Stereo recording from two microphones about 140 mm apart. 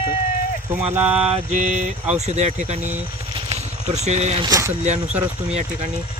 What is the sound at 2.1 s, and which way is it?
Speech, 55° right (ahead or behind).